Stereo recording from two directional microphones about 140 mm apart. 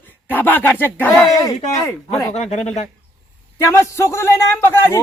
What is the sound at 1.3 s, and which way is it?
A man's voice, 25° left (ahead or behind).